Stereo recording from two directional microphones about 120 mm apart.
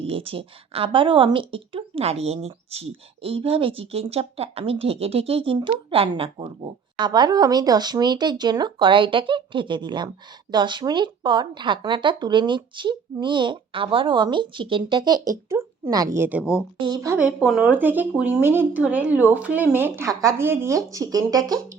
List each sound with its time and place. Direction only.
0.0 s a woman's voice: 50° right (ahead or behind)
6.9 s speech: 40° right (ahead or behind); by 16.6 s 10° right (ahead or behind)
16.8 s speech: 30° right (ahead or behind)
17.2 s speech: 10° right (ahead or behind); by 21.6 s 30° right (ahead or behind)